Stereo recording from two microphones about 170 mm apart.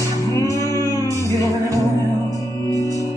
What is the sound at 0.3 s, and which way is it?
Music, 20° left (ahead or behind).